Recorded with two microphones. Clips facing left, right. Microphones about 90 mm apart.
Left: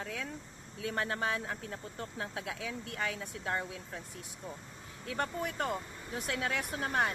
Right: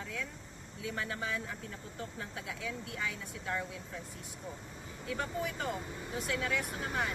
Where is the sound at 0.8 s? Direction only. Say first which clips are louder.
Left 4 dB; 60° left (ahead or behind).